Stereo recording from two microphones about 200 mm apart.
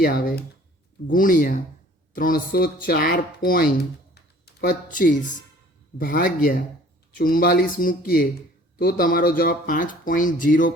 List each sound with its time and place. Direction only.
0.0 s speech: 50° left (ahead or behind)